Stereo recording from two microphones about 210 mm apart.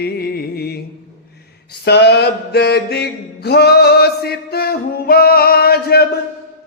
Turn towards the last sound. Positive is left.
turn(degrees=50)  # may be behind; listen again after turning